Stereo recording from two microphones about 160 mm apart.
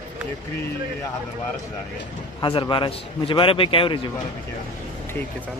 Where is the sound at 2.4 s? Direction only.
30° left (ahead or behind).